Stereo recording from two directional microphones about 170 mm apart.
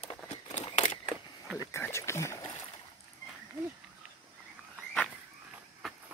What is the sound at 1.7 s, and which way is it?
Speech, 15° left (ahead or behind).